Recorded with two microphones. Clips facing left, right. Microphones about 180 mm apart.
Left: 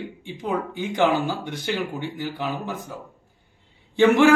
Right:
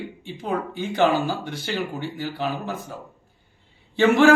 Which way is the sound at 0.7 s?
15° left (ahead or behind).